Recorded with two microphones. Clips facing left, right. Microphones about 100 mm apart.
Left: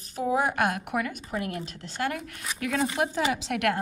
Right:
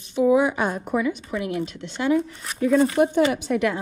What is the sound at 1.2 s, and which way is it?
Speech, 45° left (ahead or behind).